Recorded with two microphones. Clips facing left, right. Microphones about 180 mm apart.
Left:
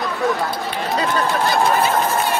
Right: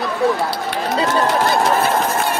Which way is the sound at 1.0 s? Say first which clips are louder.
Right 3 dB; 80° right.